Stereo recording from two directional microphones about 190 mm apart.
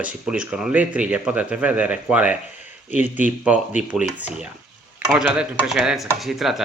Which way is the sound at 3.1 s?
10° right (ahead or behind).